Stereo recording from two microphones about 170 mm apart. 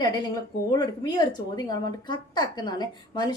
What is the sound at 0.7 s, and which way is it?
A woman's voice, 25° left (ahead or behind).